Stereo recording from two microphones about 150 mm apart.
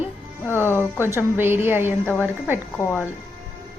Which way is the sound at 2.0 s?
10° left (ahead or behind).